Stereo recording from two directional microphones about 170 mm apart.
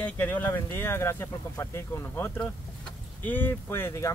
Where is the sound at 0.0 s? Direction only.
10° left (ahead or behind).